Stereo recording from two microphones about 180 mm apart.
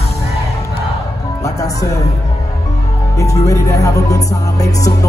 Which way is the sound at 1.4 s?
20° left (ahead or behind).